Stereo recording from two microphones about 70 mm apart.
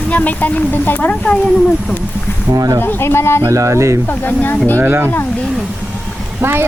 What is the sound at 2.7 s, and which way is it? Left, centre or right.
Speech, left.